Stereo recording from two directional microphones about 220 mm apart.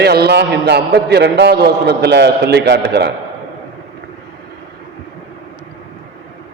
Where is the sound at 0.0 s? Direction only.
45° right (ahead or behind).